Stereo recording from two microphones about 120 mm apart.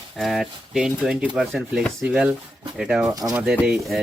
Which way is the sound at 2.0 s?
10° right (ahead or behind).